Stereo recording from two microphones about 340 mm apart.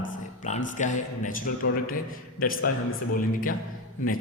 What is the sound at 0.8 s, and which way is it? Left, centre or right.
A man's voice, left.